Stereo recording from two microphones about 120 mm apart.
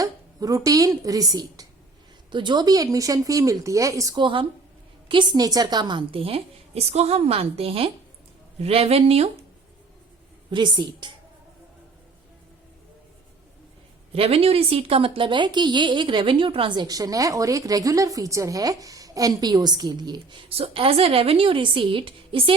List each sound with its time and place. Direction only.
0.0 s speech: 30° right (ahead or behind)
4.2 s a woman's voice: 45° right (ahead or behind)
10.5 s speech: 40° right (ahead or behind)
14.1 s speech: 55° right (ahead or behind); by 20.4 s 35° right (ahead or behind)
20.5 s a woman's voice: 50° right (ahead or behind)